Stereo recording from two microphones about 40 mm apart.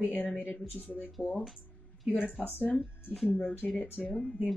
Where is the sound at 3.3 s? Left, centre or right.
Left.